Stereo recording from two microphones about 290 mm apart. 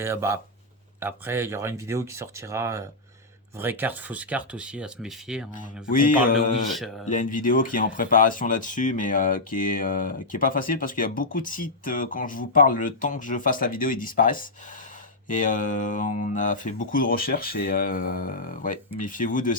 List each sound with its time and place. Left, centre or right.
0.0 s speech: centre
5.9 s speech: left